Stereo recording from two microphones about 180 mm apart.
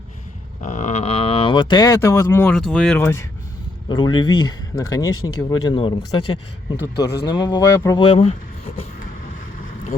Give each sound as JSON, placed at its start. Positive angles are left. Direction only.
{"t": 0.6, "sound": "speech", "side_deg": 45}
{"t": 2.6, "sound": "speech", "side_deg": 0}
{"t": 3.8, "sound": "speech", "side_deg": 25}